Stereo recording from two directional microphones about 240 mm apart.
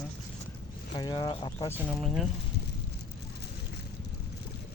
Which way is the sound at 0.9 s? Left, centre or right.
Centre.